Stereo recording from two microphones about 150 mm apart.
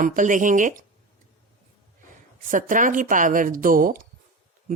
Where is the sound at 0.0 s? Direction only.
65° right (ahead or behind).